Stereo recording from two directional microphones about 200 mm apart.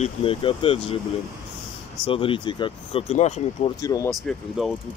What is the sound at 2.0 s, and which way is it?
Speech, 25° left (ahead or behind).